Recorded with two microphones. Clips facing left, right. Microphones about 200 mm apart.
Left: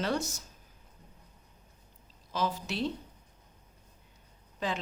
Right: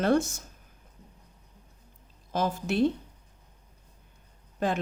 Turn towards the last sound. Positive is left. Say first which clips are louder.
# right 6 dB
turn(degrees=-50)  # may be behind; listen again after turning